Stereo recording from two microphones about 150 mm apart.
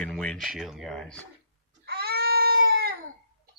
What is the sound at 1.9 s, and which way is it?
Baby cry, 90° right.